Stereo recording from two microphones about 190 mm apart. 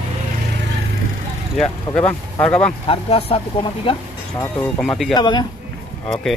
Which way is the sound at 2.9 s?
30° left (ahead or behind).